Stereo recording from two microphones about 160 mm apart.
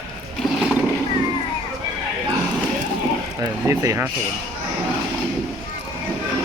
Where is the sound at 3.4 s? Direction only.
20° right (ahead or behind).